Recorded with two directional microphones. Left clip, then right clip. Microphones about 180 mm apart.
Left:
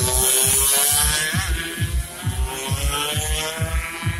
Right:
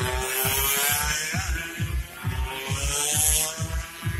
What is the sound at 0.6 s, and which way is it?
Vehicle, 40° left (ahead or behind).